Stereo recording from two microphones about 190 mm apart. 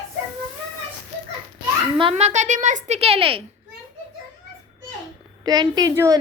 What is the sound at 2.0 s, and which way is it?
Speech, 30° right (ahead or behind).